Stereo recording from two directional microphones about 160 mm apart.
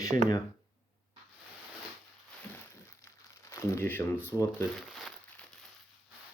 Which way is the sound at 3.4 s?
20° left (ahead or behind).